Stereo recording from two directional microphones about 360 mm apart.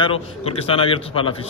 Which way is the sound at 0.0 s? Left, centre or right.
Centre.